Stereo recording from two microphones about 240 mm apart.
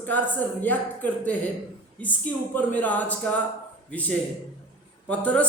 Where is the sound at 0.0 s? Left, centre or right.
Centre.